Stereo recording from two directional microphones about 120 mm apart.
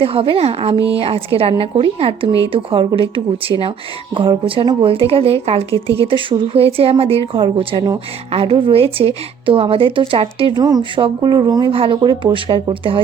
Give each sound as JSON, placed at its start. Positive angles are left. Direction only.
{"t": 0.0, "sound": "a woman's voice", "side_deg": -50}
{"t": 10.6, "sound": "speech", "side_deg": -35}
{"t": 11.7, "sound": "a woman's voice", "side_deg": -50}